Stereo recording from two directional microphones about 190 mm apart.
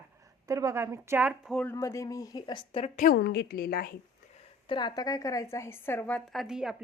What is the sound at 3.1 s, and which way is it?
Speech, 60° left (ahead or behind).